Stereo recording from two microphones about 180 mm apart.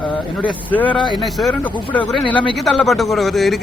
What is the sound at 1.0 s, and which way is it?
Speech, 25° left (ahead or behind).